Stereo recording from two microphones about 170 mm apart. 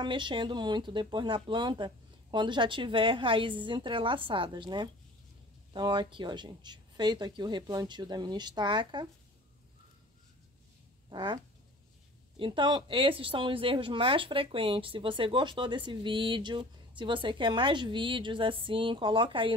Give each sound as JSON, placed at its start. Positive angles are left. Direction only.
{"t": 0.0, "sound": "speech", "side_deg": -30}
{"t": 11.1, "sound": "a sound", "side_deg": -25}
{"t": 12.4, "sound": "speech", "side_deg": -30}